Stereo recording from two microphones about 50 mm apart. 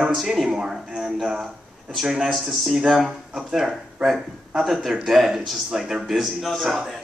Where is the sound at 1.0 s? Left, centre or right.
Centre.